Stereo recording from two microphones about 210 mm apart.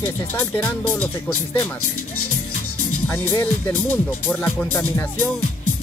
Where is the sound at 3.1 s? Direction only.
10° left (ahead or behind).